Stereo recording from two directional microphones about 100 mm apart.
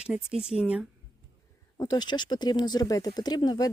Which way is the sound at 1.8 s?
40° left (ahead or behind).